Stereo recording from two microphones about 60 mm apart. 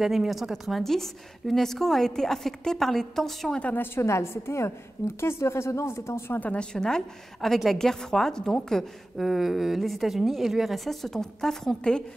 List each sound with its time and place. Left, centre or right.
0.0 s a woman's voice: centre
3.7 s a woman's voice: left
6.3 s a woman's voice: left
6.6 s a woman's voice: centre
9.3 s a woman's voice: centre